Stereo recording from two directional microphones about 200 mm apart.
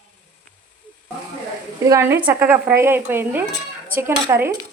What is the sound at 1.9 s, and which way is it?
Stir, 15° right (ahead or behind).